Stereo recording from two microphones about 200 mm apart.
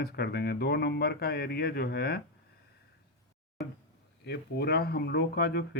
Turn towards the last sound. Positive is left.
turn(degrees=55)  # may be behind; listen again after turning